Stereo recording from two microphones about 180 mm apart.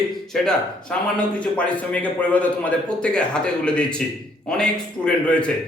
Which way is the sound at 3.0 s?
5° left (ahead or behind).